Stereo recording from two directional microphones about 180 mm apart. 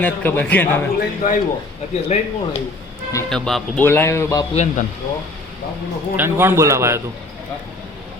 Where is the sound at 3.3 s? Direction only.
5° left (ahead or behind).